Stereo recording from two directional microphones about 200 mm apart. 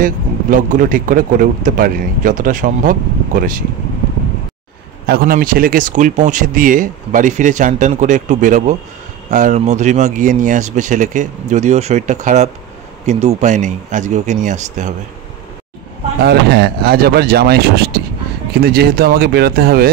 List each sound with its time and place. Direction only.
0.0 s speech: 40° right (ahead or behind)
5.0 s speech: 50° right (ahead or behind)
16.2 s speech: 55° right (ahead or behind)